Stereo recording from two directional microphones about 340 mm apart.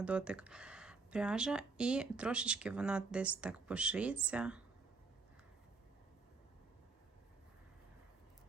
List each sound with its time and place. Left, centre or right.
0.0 s speech: centre